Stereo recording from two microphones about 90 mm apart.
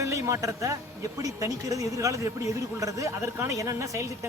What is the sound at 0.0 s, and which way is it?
Speech, 35° right (ahead or behind).